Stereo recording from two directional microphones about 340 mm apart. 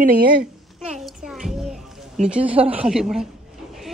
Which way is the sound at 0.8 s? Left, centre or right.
Centre.